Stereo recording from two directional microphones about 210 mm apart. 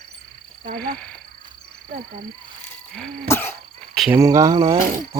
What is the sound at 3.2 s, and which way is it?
Cough, 10° left (ahead or behind).